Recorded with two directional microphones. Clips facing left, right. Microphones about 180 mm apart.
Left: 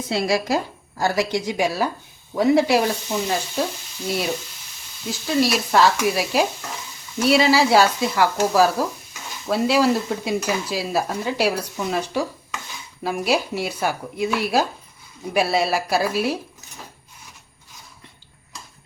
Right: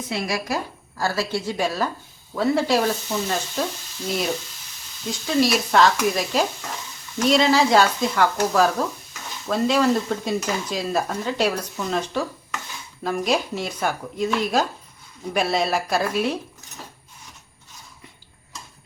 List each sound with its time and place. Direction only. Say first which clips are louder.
0.1 s stir: left 5 dB; 30° left (ahead or behind); by 3.6 s 10° left (ahead or behind)
5.0 s stir: even; centre (ahead or behind)